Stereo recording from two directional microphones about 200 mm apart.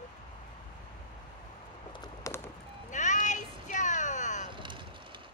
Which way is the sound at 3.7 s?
40° left (ahead or behind).